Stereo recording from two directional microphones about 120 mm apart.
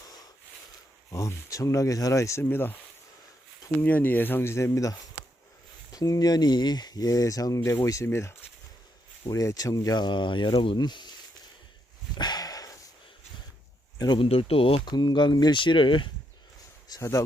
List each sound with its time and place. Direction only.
1.1 s speech: 25° left (ahead or behind)
3.8 s speech: 15° left (ahead or behind); by 11.1 s 35° left (ahead or behind)
12.1 s a sound: 35° left (ahead or behind)
14.2 s speech: 50° left (ahead or behind)
14.8 s speech: 35° left (ahead or behind)
16.9 s speech: 25° left (ahead or behind)